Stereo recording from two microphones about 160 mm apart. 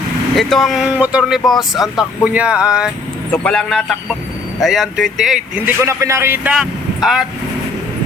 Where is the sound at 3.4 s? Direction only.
5° left (ahead or behind).